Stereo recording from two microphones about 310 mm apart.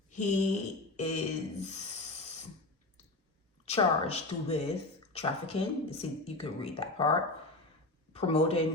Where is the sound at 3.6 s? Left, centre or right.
Centre.